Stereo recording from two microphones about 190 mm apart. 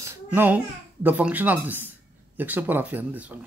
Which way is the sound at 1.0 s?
10° right (ahead or behind).